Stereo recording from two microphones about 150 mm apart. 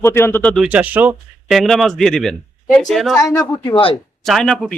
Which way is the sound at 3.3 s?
25° left (ahead or behind).